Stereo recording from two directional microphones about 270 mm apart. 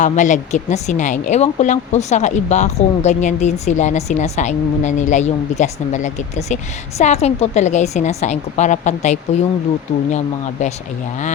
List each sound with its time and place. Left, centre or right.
0.0 s speech: left